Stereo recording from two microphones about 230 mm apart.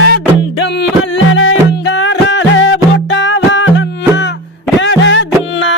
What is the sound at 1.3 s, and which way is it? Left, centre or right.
Music, left.